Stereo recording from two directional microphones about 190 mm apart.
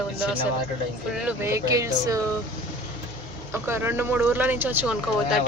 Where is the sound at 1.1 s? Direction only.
10° right (ahead or behind).